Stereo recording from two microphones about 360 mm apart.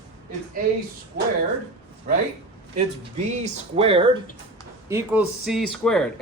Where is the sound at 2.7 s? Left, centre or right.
Centre.